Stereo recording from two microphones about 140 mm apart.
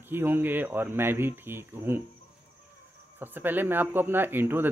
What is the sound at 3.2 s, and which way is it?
Speech, 15° right (ahead or behind).